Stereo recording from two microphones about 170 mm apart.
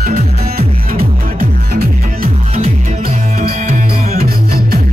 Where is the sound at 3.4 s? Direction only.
60° right (ahead or behind).